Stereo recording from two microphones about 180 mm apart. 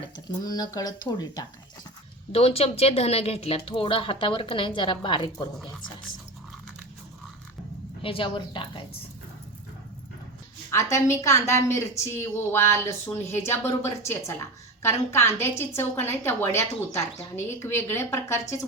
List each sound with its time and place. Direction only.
0.3 s speech: 20° left (ahead or behind)
2.3 s speech: 35° left (ahead or behind)
8.0 s speech: 30° left (ahead or behind)
10.7 s a woman's voice: 15° left (ahead or behind)